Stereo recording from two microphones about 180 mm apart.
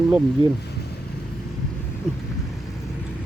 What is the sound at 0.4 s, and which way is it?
Speech, 30° left (ahead or behind).